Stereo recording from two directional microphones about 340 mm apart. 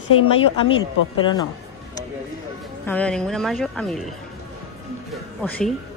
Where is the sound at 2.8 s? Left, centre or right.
Centre.